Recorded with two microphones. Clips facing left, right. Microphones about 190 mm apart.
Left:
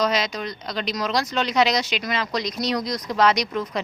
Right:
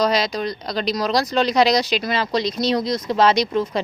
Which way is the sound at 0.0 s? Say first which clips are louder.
Right 4 dB; 35° right (ahead or behind).